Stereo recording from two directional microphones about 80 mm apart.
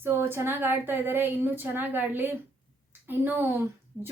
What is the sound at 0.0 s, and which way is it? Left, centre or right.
A woman's voice, right.